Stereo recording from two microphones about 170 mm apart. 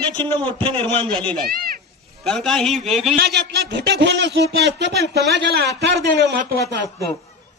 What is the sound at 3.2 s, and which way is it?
A man's voice, 80° right.